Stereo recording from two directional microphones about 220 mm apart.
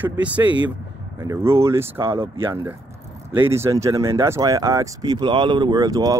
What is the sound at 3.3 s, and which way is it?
Speech, 10° right (ahead or behind).